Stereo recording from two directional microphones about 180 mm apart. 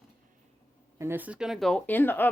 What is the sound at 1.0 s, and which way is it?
Speech, 10° right (ahead or behind).